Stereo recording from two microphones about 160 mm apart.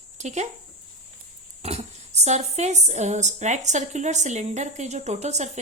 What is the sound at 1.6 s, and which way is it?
Speech, 40° right (ahead or behind).